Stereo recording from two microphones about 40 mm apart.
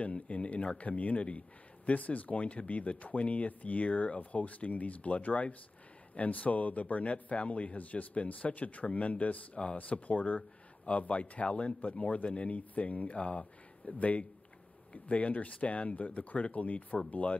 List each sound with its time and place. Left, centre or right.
0.3 s speech: left